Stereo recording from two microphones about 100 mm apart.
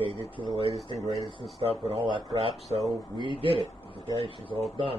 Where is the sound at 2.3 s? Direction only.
90° right.